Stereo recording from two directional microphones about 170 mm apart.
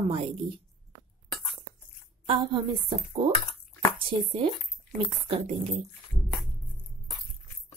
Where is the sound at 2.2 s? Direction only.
35° right (ahead or behind).